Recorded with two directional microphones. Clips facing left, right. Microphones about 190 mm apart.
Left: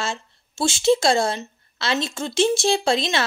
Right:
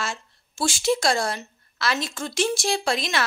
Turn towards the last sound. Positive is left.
turn(degrees=25)  # may be behind; listen again after turning